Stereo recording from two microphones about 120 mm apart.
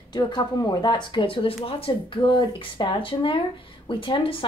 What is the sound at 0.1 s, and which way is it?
A woman's voice, 35° left (ahead or behind).